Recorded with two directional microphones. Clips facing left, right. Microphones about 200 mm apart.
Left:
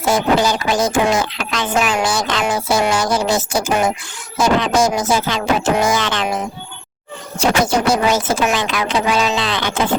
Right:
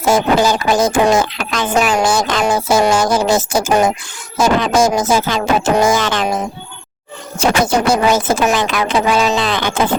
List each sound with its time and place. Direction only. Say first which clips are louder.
0.1 s speech: right 3 dB; 45° right (ahead or behind)
7.3 s speech: right 2 dB; 55° right (ahead or behind)